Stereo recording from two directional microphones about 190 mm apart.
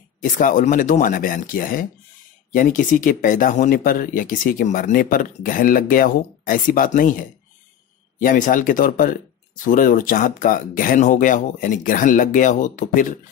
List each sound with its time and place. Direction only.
0.2 s speech: 45° left (ahead or behind)